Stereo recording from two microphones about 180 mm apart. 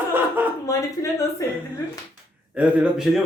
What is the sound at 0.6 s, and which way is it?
Speech, 20° left (ahead or behind).